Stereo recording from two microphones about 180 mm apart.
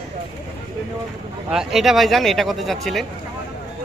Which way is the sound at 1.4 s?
Centre (ahead or behind).